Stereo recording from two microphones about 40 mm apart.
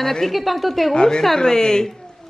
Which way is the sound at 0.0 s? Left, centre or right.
Centre.